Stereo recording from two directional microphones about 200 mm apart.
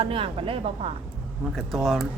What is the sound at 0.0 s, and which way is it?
Speech, 25° right (ahead or behind).